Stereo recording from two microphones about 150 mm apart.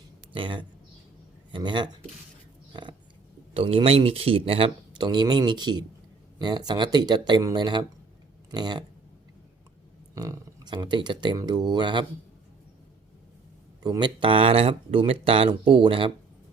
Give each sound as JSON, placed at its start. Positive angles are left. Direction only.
{"t": 0.3, "sound": "speech", "side_deg": -35}
{"t": 3.5, "sound": "speech", "side_deg": -40}
{"t": 10.2, "sound": "speech", "side_deg": -25}
{"t": 13.8, "sound": "speech", "side_deg": -30}